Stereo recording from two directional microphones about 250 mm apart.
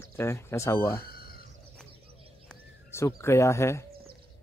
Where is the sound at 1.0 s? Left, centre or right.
Left.